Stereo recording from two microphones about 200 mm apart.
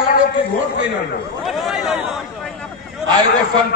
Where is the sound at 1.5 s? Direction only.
Centre (ahead or behind).